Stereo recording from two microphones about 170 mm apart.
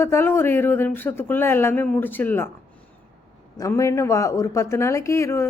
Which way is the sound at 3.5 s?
20° left (ahead or behind).